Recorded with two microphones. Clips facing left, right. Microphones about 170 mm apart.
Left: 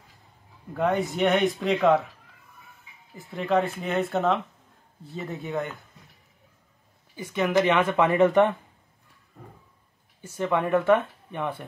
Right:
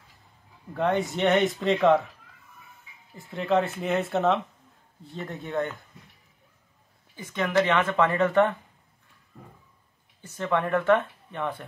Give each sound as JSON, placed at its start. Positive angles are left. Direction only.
{"t": 0.7, "sound": "speech", "side_deg": 0}
{"t": 3.2, "sound": "speech", "side_deg": 0}
{"t": 7.2, "sound": "speech", "side_deg": 10}
{"t": 10.2, "sound": "speech", "side_deg": 10}